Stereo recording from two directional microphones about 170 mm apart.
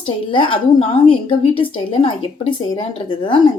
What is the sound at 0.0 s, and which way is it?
A woman's voice, 30° left (ahead or behind).